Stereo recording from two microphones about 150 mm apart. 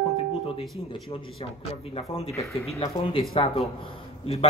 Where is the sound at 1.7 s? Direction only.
45° left (ahead or behind).